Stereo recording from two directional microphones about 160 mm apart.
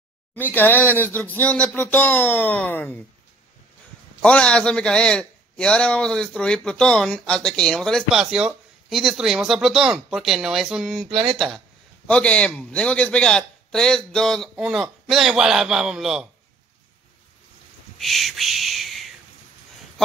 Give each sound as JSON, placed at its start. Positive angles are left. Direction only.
{"t": 0.4, "sound": "speech", "side_deg": 10}
{"t": 4.2, "sound": "a man's voice", "side_deg": 5}
{"t": 11.1, "sound": "speech", "side_deg": -35}
{"t": 11.3, "sound": "a man's voice", "side_deg": 0}
{"t": 17.9, "sound": "a sound", "side_deg": 0}